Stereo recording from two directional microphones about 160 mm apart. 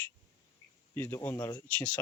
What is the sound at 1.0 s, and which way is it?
Speech, 10° left (ahead or behind).